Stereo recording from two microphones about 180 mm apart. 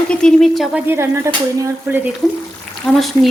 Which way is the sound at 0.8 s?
15° right (ahead or behind).